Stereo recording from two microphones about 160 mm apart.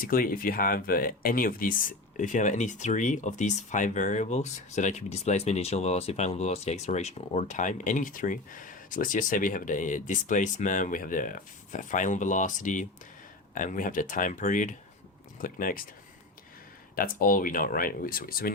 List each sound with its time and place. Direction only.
0.0 s speech: 65° left (ahead or behind)
16.9 s speech: 65° left (ahead or behind)